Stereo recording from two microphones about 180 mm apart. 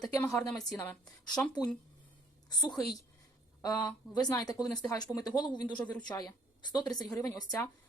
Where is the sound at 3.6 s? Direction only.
20° left (ahead or behind).